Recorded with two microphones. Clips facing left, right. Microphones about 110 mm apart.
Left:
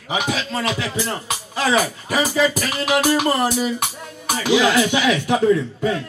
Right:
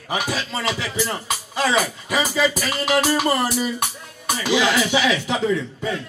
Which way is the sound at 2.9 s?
15° left (ahead or behind).